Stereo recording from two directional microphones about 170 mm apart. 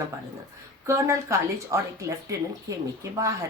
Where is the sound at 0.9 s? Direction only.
15° right (ahead or behind).